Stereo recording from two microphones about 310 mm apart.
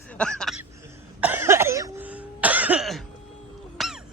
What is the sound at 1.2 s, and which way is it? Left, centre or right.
Cough, centre.